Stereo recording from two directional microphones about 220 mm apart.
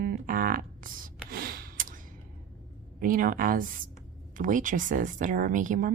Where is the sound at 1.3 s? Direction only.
45° right (ahead or behind).